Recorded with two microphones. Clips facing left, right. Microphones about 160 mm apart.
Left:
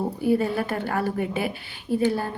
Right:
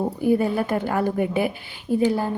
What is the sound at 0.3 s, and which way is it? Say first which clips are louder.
A woman's voice: right 2 dB; 20° right (ahead or behind).